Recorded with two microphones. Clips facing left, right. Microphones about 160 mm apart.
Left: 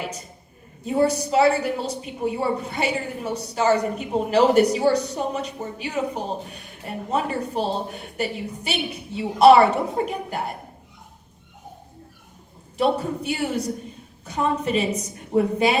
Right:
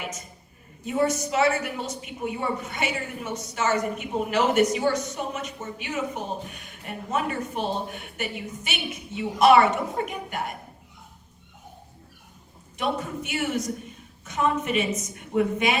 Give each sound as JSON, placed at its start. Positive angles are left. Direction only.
{"t": 0.9, "sound": "a woman's voice", "side_deg": 35}
{"t": 12.7, "sound": "a woman's voice", "side_deg": 35}